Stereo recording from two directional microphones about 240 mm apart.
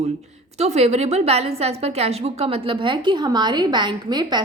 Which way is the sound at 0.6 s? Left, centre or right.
Right.